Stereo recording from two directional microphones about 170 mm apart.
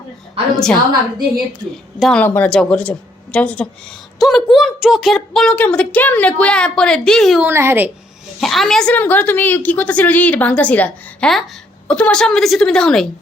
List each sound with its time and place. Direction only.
0.5 s a woman's voice: 5° left (ahead or behind)
7.4 s a woman's voice: 15° right (ahead or behind)
8.4 s a woman's voice: centre (ahead or behind)